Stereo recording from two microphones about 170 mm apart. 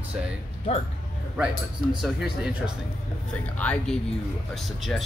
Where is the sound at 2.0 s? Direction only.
5° right (ahead or behind).